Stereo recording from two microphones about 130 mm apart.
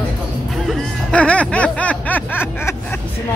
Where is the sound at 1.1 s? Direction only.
10° left (ahead or behind).